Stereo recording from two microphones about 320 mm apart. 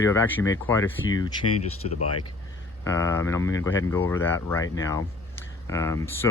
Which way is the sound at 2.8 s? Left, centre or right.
Centre.